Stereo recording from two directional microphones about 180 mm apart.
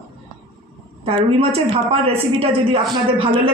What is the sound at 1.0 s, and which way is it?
A woman's voice, 30° right (ahead or behind).